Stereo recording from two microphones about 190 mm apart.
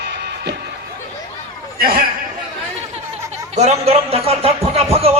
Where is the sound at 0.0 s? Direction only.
60° right (ahead or behind).